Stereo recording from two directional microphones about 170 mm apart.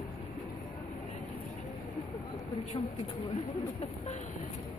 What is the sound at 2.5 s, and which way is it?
Speech, 40° left (ahead or behind).